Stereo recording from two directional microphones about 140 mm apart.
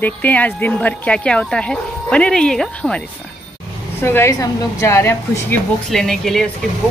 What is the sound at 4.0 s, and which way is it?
A woman's voice, 20° left (ahead or behind).